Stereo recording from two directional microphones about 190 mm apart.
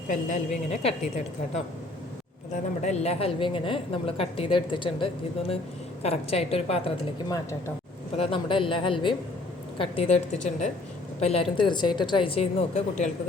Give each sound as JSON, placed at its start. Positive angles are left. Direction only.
{"t": 0.1, "sound": "a woman's voice", "side_deg": 40}
{"t": 2.8, "sound": "a woman's voice", "side_deg": 35}
{"t": 8.1, "sound": "a woman's voice", "side_deg": 30}